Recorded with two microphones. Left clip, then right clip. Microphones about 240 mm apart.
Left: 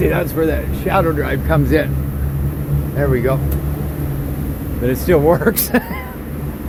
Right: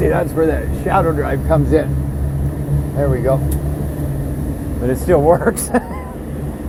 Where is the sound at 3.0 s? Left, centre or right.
Left.